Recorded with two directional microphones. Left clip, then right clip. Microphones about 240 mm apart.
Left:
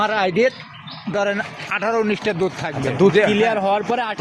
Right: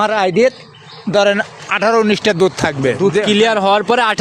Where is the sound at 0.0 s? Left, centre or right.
Right.